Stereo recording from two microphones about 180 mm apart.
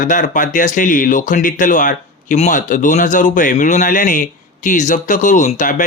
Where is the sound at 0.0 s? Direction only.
45° left (ahead or behind).